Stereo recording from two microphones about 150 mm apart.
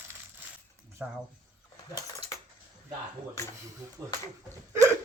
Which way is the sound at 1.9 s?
25° left (ahead or behind).